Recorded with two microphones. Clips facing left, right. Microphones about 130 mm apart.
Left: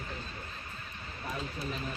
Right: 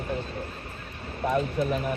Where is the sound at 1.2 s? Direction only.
60° right (ahead or behind).